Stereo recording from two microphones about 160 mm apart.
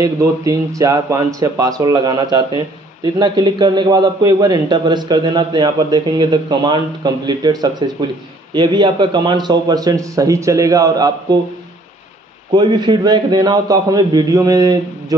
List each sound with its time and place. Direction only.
0.0 s speech: 20° right (ahead or behind)
12.5 s speech: 30° right (ahead or behind)